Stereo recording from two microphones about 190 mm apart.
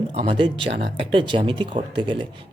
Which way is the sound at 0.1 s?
30° right (ahead or behind).